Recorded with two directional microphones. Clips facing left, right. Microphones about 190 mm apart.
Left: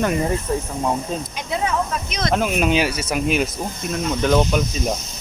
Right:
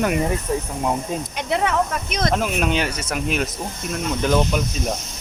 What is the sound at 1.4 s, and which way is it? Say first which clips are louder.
Speech: right 3 dB; 70° right (ahead or behind).